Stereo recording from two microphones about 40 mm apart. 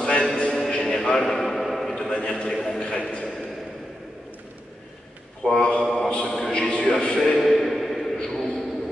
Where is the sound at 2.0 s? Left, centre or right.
Centre.